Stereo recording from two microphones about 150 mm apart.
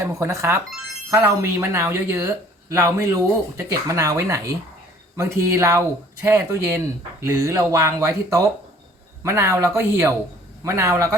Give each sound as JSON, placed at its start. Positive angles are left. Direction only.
{"t": 0.0, "sound": "speech", "side_deg": -20}